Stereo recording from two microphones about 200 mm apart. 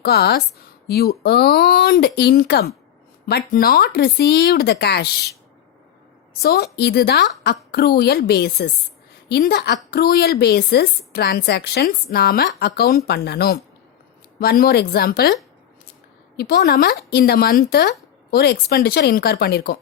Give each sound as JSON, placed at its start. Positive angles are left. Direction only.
{"t": 0.0, "sound": "a woman's voice", "side_deg": 55}
{"t": 6.4, "sound": "a woman's voice", "side_deg": 55}
{"t": 16.4, "sound": "a woman's voice", "side_deg": 50}